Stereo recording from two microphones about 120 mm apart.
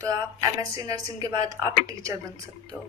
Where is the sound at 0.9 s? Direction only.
30° right (ahead or behind).